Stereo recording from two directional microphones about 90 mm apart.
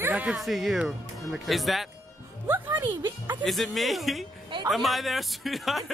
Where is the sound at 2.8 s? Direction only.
55° right (ahead or behind).